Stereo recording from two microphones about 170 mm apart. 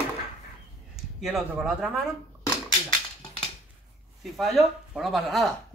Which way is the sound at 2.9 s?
30° left (ahead or behind).